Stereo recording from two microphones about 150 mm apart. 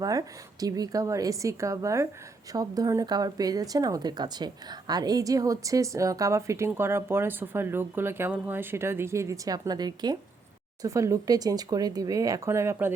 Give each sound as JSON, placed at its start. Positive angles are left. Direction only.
{"t": 0.0, "sound": "speech", "side_deg": -25}